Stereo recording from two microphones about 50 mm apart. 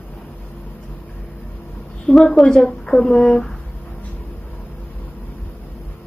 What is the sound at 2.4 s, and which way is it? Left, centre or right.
Speech, centre.